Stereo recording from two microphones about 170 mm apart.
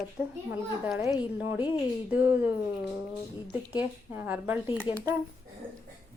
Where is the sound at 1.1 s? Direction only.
10° right (ahead or behind).